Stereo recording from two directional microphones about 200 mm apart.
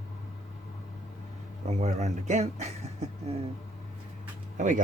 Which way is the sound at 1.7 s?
35° right (ahead or behind).